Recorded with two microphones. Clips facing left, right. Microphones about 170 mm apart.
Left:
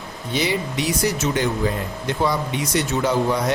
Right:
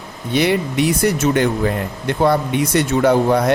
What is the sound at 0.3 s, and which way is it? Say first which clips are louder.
Speech: right 6 dB; 60° right (ahead or behind).